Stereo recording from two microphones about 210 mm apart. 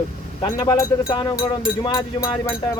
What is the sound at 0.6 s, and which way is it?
Speech, 20° left (ahead or behind).